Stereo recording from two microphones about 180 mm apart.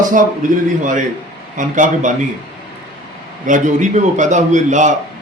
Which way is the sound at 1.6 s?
45° right (ahead or behind).